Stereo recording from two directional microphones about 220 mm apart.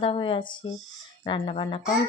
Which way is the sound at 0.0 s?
25° left (ahead or behind).